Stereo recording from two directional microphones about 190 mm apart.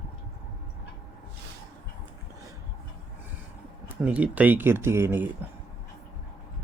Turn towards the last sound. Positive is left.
turn(degrees=-10)  # may be behind; listen again after turning